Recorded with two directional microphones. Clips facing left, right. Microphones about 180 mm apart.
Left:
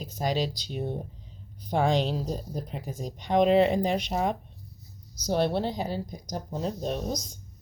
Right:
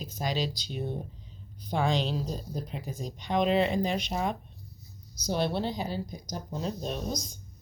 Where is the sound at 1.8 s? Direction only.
50° left (ahead or behind).